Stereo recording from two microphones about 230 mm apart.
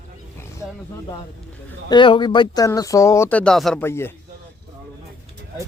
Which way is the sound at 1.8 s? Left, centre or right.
Centre.